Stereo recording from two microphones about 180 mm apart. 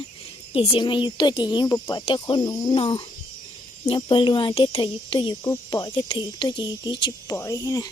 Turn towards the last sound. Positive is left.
turn(degrees=20)  # may be behind; listen again after turning